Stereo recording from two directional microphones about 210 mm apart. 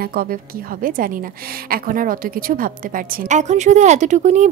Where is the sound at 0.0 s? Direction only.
45° right (ahead or behind).